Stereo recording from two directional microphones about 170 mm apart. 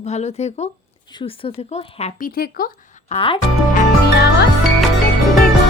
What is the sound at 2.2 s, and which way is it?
Speech, 60° left (ahead or behind).